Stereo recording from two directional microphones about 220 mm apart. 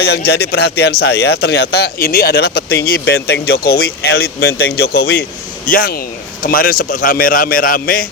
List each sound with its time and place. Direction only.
0.0 s a man's voice: 45° left (ahead or behind)